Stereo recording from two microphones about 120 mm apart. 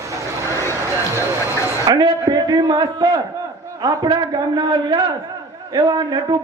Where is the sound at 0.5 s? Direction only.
25° right (ahead or behind).